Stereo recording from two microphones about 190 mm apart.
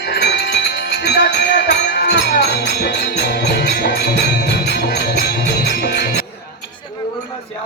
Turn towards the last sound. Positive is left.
turn(degrees=60)  # may be behind; listen again after turning